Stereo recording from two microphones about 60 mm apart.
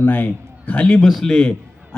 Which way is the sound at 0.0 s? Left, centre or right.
Left.